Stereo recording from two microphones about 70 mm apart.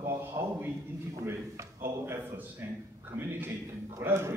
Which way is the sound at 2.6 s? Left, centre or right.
Right.